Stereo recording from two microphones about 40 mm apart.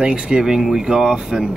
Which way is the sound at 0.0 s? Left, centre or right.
Right.